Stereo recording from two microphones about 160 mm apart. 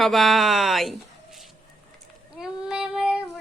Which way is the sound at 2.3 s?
5° right (ahead or behind).